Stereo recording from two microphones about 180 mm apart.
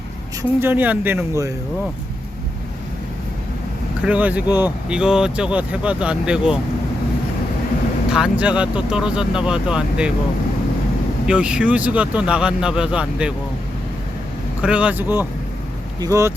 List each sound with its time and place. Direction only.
0.6 s a man's voice: 10° right (ahead or behind)
4.0 s a man's voice: 10° right (ahead or behind)
8.1 s speech: 5° right (ahead or behind)
11.3 s speech: 5° right (ahead or behind)
14.6 s a man's voice: 5° right (ahead or behind)
16.0 s a man's voice: 20° right (ahead or behind)